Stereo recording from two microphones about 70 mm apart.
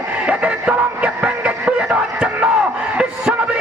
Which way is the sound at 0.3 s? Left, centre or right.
Centre.